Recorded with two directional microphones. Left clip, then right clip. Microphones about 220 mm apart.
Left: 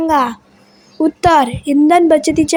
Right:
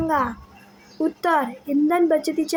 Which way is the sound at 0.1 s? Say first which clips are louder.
Left 8 dB; 30° left (ahead or behind).